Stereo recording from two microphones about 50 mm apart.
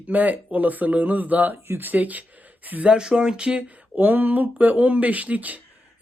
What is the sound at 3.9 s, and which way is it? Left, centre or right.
Speech, right.